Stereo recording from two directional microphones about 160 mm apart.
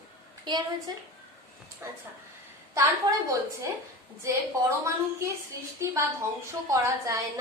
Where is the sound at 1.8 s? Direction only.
15° right (ahead or behind).